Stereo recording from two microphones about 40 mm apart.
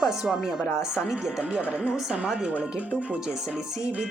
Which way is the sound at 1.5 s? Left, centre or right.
Right.